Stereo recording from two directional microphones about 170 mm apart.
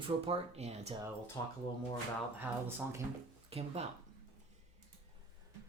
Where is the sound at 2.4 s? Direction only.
10° right (ahead or behind).